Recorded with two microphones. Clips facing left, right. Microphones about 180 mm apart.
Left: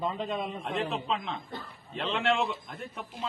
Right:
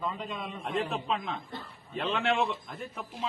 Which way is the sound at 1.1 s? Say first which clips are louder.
Even; centre (ahead or behind).